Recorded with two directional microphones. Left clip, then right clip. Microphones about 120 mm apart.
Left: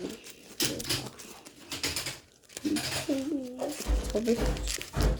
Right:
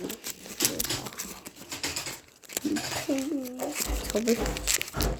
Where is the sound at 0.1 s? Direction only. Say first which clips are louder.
Right 6 dB; 65° right (ahead or behind).